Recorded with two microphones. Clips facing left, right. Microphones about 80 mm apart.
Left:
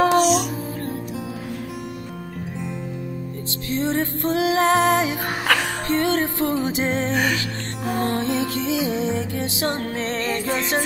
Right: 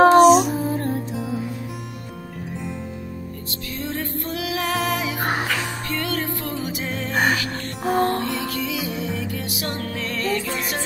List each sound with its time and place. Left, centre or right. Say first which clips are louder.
0.0 s music: right 6 dB; right
3.7 s music: left 6 dB; left
5.5 s music: left 5 dB; left
5.9 s music: left 7 dB; left
7.8 s music: right 3 dB; right
8.2 s music: left 3 dB; left